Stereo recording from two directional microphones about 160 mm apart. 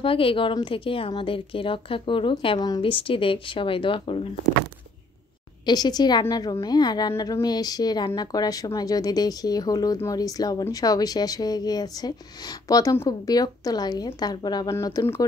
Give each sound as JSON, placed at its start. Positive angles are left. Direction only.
{"t": 0.0, "sound": "a woman's voice", "side_deg": 35}
{"t": 5.7, "sound": "a woman's voice", "side_deg": 25}